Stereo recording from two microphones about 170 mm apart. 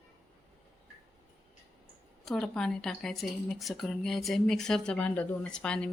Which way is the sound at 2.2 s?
5° left (ahead or behind).